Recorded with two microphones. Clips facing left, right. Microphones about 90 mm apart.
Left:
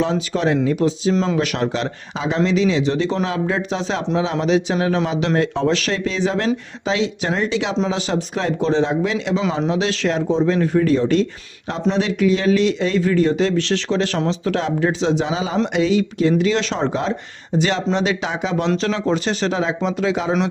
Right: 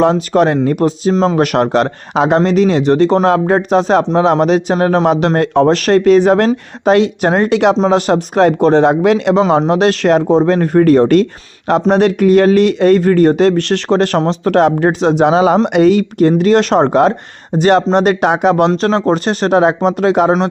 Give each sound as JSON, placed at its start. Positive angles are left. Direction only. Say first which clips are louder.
{"t": 0.0, "sound": "speech", "louder": "right 9 dB", "side_deg": -55}
{"t": 1.1, "sound": "speech", "louder": "right 6 dB", "side_deg": -35}
{"t": 1.4, "sound": "speech", "louder": "right 9 dB", "side_deg": -55}